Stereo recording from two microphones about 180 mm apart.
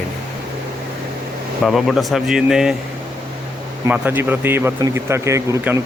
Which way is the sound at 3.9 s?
10° right (ahead or behind).